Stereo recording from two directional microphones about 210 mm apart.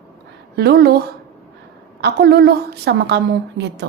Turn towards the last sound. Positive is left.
turn(degrees=-55)  # may be behind; listen again after turning